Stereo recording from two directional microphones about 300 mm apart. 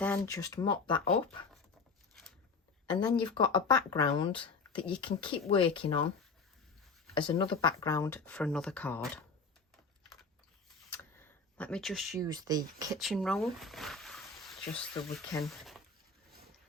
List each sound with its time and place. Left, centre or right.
0.0 s speech: centre
2.9 s speech: centre
7.1 s speech: centre
10.9 s a sound: centre
12.2 s speech: centre
13.0 s speech: centre